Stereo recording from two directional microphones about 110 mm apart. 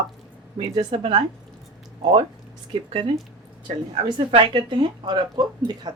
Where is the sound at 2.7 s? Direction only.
50° right (ahead or behind).